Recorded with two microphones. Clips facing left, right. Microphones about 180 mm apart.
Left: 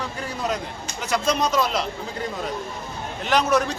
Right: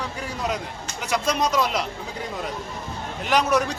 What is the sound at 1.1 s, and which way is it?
Speech, 10° right (ahead or behind).